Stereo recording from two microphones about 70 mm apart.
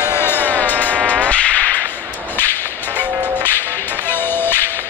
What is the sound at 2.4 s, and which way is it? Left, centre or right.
Whip, left.